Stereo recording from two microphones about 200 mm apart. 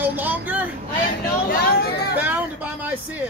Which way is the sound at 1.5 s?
50° left (ahead or behind).